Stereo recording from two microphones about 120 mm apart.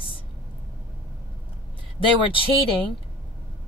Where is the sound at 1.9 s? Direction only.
50° left (ahead or behind).